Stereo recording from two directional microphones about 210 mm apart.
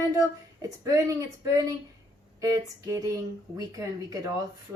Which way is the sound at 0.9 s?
15° right (ahead or behind).